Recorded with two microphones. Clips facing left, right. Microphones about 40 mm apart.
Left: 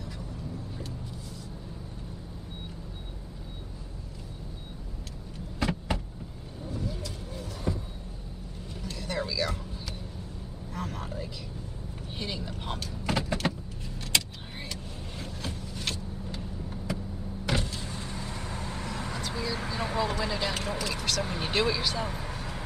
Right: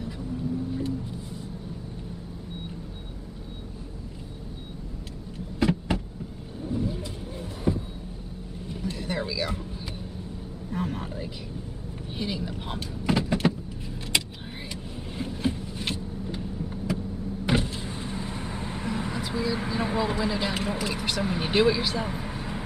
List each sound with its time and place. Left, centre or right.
5.6 s power windows: centre
6.7 s vehicle: right
8.6 s music: centre
10.7 s a sound: centre
12.2 s speech: centre
13.1 s power windows: centre
14.7 s vehicle: centre
16.3 s vehicle: centre
17.5 s vehicle: centre